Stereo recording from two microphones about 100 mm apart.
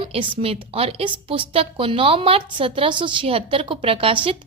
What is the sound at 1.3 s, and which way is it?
A woman's voice, 65° right (ahead or behind).